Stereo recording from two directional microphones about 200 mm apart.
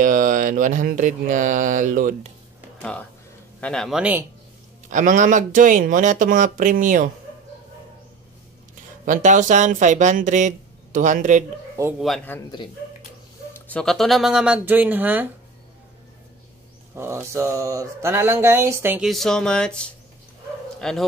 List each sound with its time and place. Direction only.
0.0 s speech: 40° right (ahead or behind)
2.8 s speech: 5° left (ahead or behind)
4.8 s speech: 40° right (ahead or behind)
9.0 s speech: 40° right (ahead or behind)
12.0 s speech: centre (ahead or behind)
13.5 s speech: 5° left (ahead or behind); by 15.2 s 10° right (ahead or behind)
16.9 s a sound: 15° right (ahead or behind)
19.0 s speech: centre (ahead or behind)